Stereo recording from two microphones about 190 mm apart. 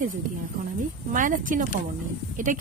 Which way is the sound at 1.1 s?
45° right (ahead or behind).